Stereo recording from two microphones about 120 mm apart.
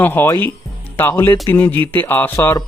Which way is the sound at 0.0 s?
20° left (ahead or behind).